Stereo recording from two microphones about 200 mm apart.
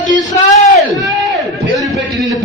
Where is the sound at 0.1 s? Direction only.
40° left (ahead or behind).